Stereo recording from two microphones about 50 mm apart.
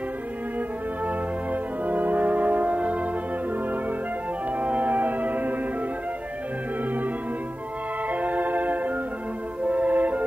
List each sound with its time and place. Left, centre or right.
1.0 s brass instrument: right
4.6 s music: right
8.1 s organ: right
9.7 s music: right